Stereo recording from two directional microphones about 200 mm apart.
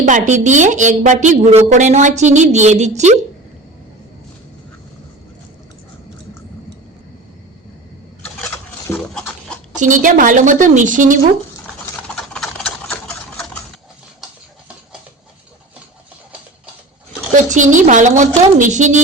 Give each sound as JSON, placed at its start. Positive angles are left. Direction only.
{"t": 0.0, "sound": "speech", "side_deg": -40}
{"t": 8.9, "sound": "pig", "side_deg": 5}
{"t": 9.7, "sound": "speech", "side_deg": -40}
{"t": 11.6, "sound": "a sound", "side_deg": 5}
{"t": 17.3, "sound": "a woman's voice", "side_deg": -40}